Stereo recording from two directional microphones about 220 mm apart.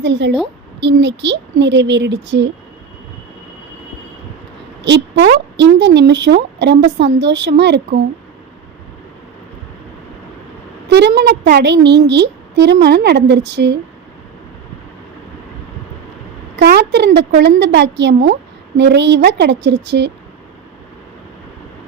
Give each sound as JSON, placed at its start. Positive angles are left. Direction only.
{"t": 0.0, "sound": "speech", "side_deg": -50}
{"t": 4.8, "sound": "speech", "side_deg": -50}
{"t": 10.8, "sound": "speech", "side_deg": -50}
{"t": 16.6, "sound": "speech", "side_deg": -50}